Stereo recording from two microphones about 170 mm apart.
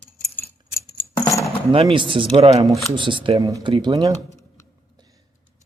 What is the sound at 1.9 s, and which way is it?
Speech, 30° right (ahead or behind).